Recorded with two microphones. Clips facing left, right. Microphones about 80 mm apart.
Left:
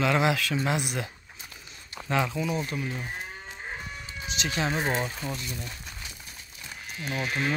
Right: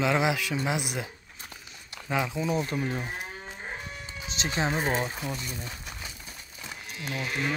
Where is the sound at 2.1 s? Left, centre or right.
Centre.